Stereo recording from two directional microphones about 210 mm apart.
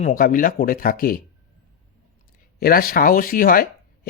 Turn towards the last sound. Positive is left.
turn(degrees=40)  # may be behind; listen again after turning